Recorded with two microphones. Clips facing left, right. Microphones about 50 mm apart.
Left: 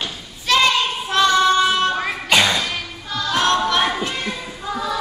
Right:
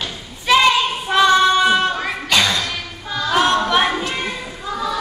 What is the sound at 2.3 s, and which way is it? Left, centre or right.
Music, centre.